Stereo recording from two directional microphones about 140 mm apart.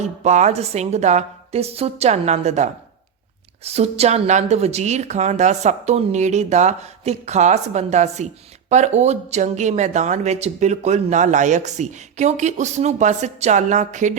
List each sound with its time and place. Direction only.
0.0 s a woman's voice: 55° right (ahead or behind)